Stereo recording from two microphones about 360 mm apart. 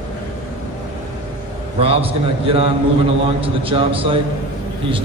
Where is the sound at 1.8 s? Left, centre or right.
Centre.